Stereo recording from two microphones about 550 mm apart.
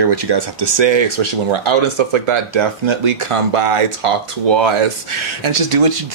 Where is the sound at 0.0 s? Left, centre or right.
Right.